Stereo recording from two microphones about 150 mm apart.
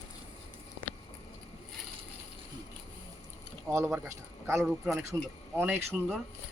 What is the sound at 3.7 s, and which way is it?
A man's voice, 20° right (ahead or behind).